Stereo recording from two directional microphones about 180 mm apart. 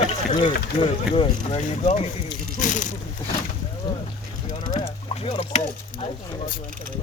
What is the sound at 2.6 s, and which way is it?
Speech, 45° left (ahead or behind).